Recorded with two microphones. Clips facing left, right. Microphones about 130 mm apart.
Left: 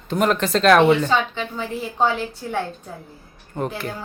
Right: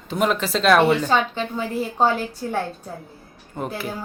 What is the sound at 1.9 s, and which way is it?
Speech, 40° right (ahead or behind).